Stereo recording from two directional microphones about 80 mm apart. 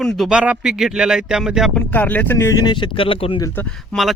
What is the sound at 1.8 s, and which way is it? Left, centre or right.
Speech, left.